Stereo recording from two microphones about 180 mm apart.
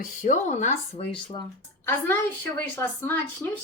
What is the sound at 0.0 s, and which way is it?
Speech, 45° left (ahead or behind).